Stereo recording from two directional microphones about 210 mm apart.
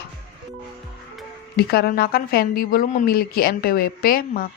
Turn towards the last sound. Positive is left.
turn(degrees=45)  # may be behind; listen again after turning